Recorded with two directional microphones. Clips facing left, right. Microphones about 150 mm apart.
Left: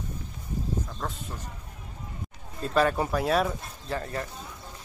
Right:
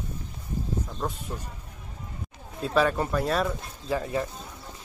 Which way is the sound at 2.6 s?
Centre (ahead or behind).